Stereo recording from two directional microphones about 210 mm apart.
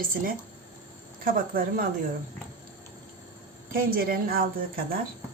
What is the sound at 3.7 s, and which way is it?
A woman's voice, 45° right (ahead or behind).